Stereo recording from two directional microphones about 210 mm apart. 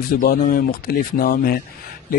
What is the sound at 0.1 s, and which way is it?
Speech, 40° left (ahead or behind).